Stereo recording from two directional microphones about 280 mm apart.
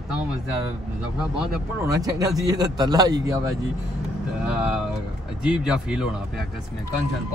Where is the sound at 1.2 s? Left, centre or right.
Centre.